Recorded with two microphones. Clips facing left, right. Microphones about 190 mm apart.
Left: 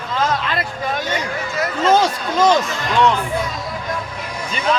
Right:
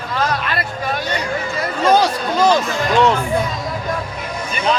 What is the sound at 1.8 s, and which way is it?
Speech, 25° left (ahead or behind).